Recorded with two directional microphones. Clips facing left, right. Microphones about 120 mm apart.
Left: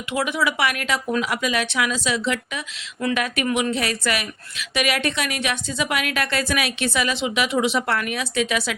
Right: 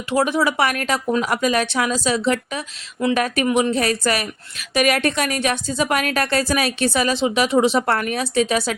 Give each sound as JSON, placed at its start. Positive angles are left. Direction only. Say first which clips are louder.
{"t": 0.1, "sound": "speech", "louder": "right 5 dB", "side_deg": -35}
{"t": 3.0, "sound": "speech", "louder": "right 4 dB", "side_deg": -25}
{"t": 3.5, "sound": "speech", "louder": "right 5 dB", "side_deg": -40}